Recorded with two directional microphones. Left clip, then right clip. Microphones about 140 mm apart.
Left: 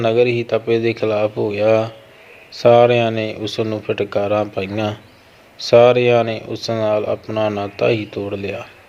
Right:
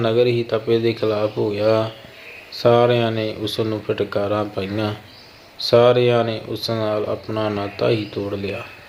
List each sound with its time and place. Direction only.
0.0 s speech: 20° left (ahead or behind)